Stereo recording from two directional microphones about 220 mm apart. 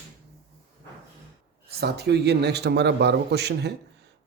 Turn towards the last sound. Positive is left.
turn(degrees=-50)  # may be behind; listen again after turning